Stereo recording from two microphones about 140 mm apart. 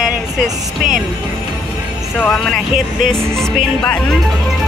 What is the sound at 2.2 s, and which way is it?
Speech, centre (ahead or behind).